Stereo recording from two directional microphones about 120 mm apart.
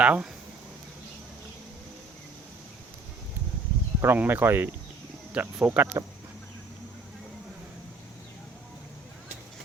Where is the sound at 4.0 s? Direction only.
20° right (ahead or behind).